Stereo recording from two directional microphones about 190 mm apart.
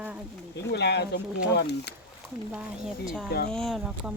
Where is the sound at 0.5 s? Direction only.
60° left (ahead or behind).